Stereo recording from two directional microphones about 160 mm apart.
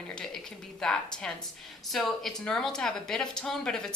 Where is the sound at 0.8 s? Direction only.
5° left (ahead or behind).